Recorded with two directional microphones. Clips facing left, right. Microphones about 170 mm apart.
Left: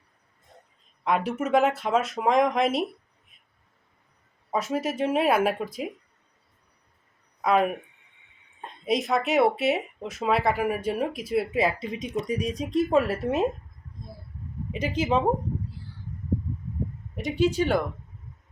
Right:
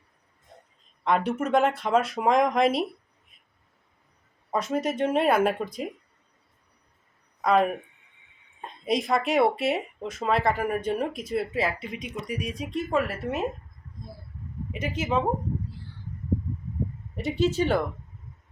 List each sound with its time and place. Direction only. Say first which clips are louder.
1.0 s speech: right 1 dB; 5° left (ahead or behind)
4.5 s speech: even; 5° left (ahead or behind)
7.4 s speech: right 1 dB; 5° left (ahead or behind)
11.5 s speech: left 3 dB; 15° left (ahead or behind)
11.9 s speech: left 6 dB; 35° left (ahead or behind)
12.3 s a woman's voice: left 3 dB; 25° left (ahead or behind)
14.7 s a woman's voice: left 3 dB; 30° left (ahead or behind)
17.2 s speech: left 1 dB; 15° left (ahead or behind)